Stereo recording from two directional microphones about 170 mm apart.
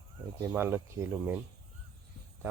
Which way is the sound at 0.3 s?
15° right (ahead or behind).